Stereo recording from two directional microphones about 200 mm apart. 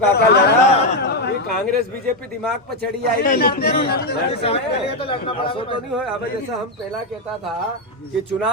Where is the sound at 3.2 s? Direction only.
50° left (ahead or behind).